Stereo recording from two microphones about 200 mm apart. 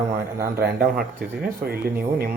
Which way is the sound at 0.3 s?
15° right (ahead or behind).